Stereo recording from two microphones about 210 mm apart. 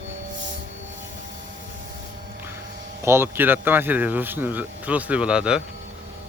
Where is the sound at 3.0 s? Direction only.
10° right (ahead or behind).